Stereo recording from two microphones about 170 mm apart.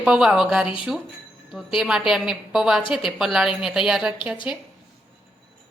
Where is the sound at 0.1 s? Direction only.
5° right (ahead or behind).